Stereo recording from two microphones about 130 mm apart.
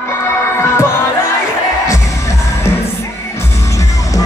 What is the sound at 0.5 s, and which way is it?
Music, 20° left (ahead or behind).